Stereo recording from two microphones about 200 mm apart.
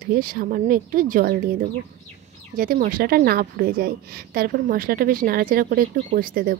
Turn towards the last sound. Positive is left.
turn(degrees=-45)  # may be behind; listen again after turning